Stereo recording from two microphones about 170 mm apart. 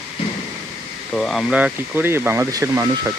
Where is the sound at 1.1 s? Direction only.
Centre (ahead or behind).